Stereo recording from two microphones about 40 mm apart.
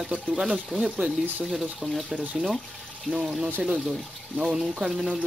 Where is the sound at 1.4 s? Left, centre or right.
Centre.